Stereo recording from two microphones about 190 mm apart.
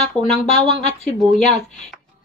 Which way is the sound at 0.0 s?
35° left (ahead or behind).